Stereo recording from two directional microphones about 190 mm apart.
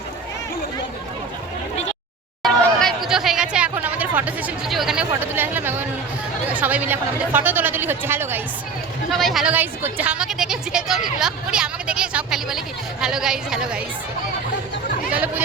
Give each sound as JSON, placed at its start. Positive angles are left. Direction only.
{"t": 2.4, "sound": "chatter", "side_deg": 0}
{"t": 6.5, "sound": "speech", "side_deg": -10}
{"t": 9.0, "sound": "a woman's voice", "side_deg": 0}